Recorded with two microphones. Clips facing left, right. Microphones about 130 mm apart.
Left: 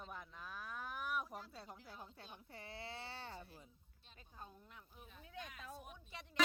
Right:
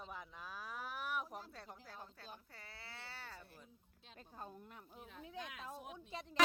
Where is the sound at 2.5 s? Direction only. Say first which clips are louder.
Left 6 dB; 20° left (ahead or behind).